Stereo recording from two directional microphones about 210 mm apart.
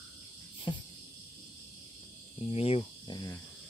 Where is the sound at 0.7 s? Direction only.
20° left (ahead or behind).